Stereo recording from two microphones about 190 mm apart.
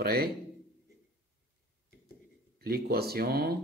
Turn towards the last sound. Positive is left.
turn(degrees=-55)  # may be behind; listen again after turning